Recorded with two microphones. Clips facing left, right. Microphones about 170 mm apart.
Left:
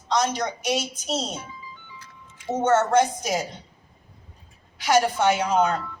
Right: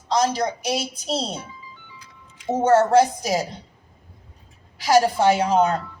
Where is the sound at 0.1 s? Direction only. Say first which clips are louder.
Right 3 dB; 35° right (ahead or behind).